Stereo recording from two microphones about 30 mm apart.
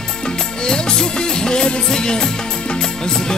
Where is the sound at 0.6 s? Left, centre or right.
Left.